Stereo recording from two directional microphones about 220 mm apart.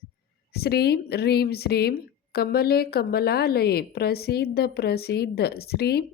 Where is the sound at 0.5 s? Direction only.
45° left (ahead or behind).